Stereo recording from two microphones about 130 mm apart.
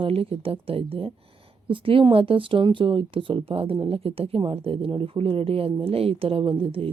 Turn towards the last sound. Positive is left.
turn(degrees=-45)  # may be behind; listen again after turning